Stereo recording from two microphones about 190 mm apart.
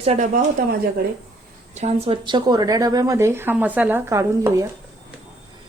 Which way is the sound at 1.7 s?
35° right (ahead or behind).